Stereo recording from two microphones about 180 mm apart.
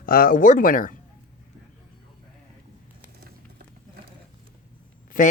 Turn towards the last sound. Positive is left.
turn(degrees=50)  # may be behind; listen again after turning